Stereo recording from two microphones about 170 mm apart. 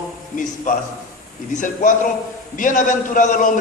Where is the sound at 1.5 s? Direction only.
50° left (ahead or behind).